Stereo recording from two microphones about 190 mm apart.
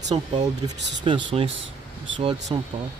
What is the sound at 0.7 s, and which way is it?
Speech, 65° right (ahead or behind).